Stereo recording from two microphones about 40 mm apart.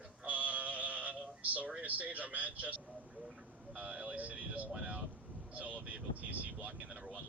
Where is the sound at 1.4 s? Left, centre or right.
Right.